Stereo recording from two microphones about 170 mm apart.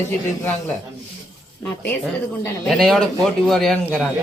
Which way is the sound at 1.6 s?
10° left (ahead or behind).